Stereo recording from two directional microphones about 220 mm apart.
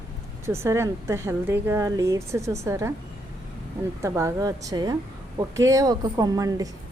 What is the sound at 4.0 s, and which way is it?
A woman's voice, 15° right (ahead or behind).